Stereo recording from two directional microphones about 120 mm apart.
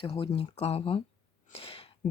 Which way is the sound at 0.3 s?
60° left (ahead or behind).